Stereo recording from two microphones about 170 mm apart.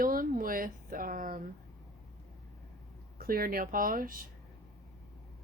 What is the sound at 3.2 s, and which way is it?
Speech, 60° right (ahead or behind).